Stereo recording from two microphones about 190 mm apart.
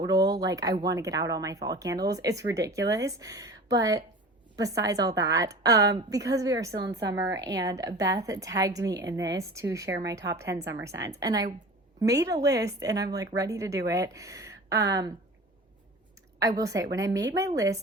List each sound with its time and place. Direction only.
0.0 s a woman's voice: 20° right (ahead or behind)
6.8 s a woman's voice: 60° right (ahead or behind)
7.1 s a woman's voice: 20° right (ahead or behind)
16.4 s a woman's voice: 20° right (ahead or behind)